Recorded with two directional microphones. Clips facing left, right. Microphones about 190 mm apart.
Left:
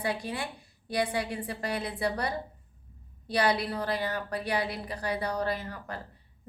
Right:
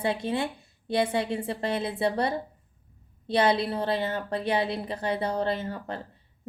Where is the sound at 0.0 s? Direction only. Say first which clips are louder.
Right 5 dB; 25° right (ahead or behind).